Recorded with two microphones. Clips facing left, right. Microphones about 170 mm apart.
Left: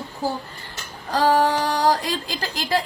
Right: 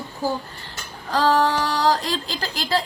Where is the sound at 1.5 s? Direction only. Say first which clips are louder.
Left 1 dB; 50° left (ahead or behind).